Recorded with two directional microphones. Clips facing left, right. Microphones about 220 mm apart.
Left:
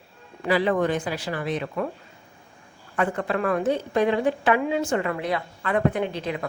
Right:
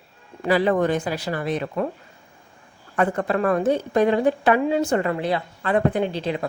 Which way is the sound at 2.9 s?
45° right (ahead or behind).